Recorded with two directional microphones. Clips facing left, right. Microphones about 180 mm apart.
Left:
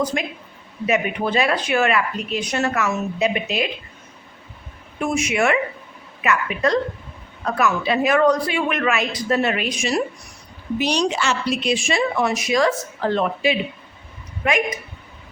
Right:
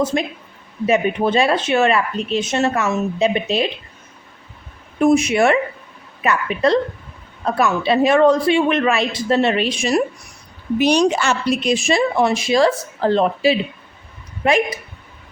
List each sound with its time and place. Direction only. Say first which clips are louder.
0.0 s speech: right 4 dB; 30° right (ahead or behind)
4.9 s a woman's voice: right 7 dB; 35° right (ahead or behind)
10.8 s a woman's voice: right 6 dB; 55° right (ahead or behind); by 14.8 s 30° right (ahead or behind)